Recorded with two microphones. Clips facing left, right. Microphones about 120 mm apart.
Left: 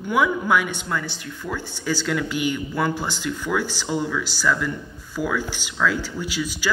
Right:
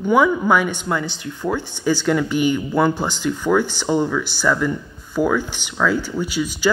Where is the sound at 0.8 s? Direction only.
20° right (ahead or behind).